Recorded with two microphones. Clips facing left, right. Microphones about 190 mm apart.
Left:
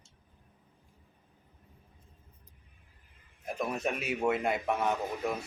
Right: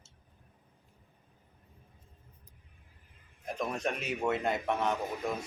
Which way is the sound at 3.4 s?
5° left (ahead or behind).